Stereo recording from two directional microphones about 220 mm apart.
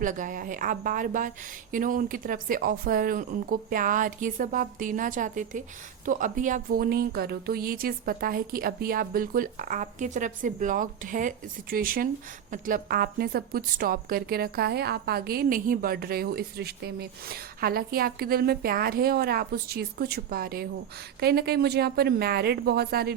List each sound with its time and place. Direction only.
0.0 s a woman's voice: 35° right (ahead or behind)